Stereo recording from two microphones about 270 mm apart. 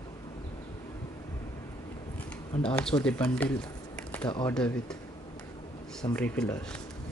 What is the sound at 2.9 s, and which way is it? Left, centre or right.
Speech, centre.